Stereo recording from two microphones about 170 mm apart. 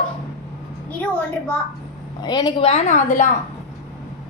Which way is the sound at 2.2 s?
25° left (ahead or behind).